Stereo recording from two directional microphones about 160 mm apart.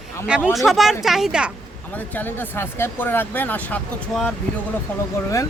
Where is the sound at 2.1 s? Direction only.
10° left (ahead or behind).